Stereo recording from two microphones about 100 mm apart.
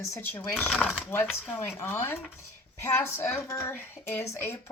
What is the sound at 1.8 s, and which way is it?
A woman's voice, 25° left (ahead or behind).